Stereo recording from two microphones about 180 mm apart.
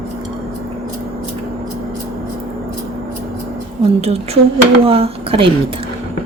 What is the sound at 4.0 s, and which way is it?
Speech, 35° right (ahead or behind).